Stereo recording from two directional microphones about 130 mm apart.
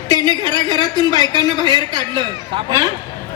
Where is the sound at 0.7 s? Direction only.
30° right (ahead or behind).